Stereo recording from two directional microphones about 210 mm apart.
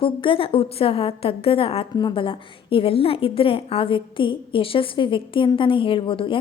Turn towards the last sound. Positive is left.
turn(degrees=25)  # may be behind; listen again after turning